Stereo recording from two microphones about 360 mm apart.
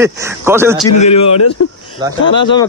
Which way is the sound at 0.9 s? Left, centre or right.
Centre.